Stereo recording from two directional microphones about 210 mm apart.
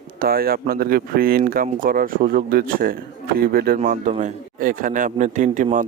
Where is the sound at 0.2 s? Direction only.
45° right (ahead or behind).